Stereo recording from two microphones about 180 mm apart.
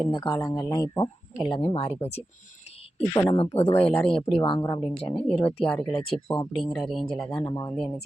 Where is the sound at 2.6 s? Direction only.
35° left (ahead or behind).